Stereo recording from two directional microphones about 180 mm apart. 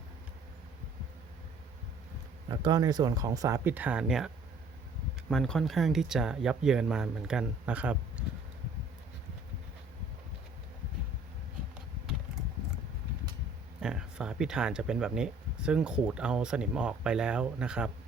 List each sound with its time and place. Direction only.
2.5 s speech: 25° right (ahead or behind); by 4.3 s 5° right (ahead or behind)
5.3 s speech: 5° left (ahead or behind)
13.8 s speech: 5° right (ahead or behind)